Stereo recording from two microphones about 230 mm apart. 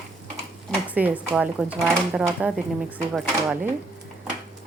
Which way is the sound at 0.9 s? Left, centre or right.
Centre.